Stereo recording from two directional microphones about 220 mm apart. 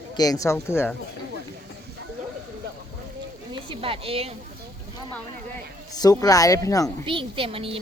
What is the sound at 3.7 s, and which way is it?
Speech, 25° right (ahead or behind).